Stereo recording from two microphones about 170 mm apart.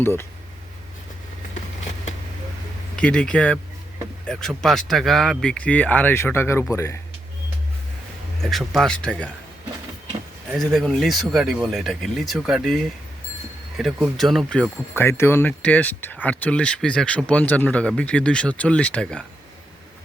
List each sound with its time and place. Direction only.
0.0 s speech: 15° left (ahead or behind)
2.9 s speech: 5° left (ahead or behind)
8.4 s speech: centre (ahead or behind)
10.5 s speech: centre (ahead or behind)